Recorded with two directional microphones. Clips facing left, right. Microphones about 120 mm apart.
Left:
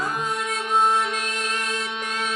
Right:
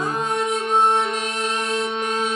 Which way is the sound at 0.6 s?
35° right (ahead or behind).